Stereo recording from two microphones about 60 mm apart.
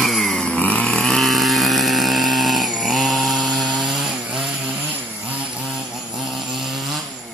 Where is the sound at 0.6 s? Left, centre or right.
Left.